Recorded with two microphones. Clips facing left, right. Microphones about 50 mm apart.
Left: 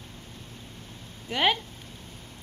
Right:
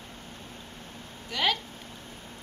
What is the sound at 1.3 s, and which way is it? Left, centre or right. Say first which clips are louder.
Speech: left 3 dB; left.